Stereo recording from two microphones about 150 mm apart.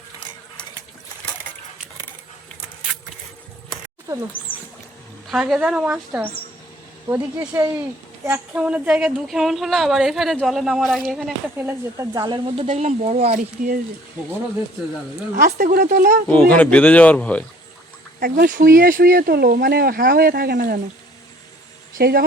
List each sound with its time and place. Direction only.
0.2 s a sound: 30° left (ahead or behind)
4.1 s speech: 20° right (ahead or behind)
5.3 s a woman's voice: 5° right (ahead or behind)
7.1 s a woman's voice: 20° right (ahead or behind); by 11.3 s centre (ahead or behind)
11.5 s speech: 15° right (ahead or behind)
12.1 s speech: 30° right (ahead or behind)
12.7 s speech: 45° right (ahead or behind)
13.6 s speech: 65° right (ahead or behind)
15.4 s speech: 60° right (ahead or behind)
16.3 s speech: 10° left (ahead or behind)
18.2 s speech: 75° right (ahead or behind)
21.9 s speech: 80° right